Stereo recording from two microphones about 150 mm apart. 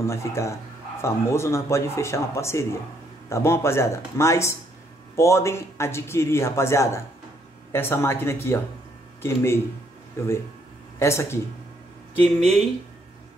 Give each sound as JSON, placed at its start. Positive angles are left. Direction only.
{"t": 0.0, "sound": "a man's voice", "side_deg": 20}